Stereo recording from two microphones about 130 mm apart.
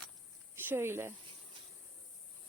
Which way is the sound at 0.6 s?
15° right (ahead or behind).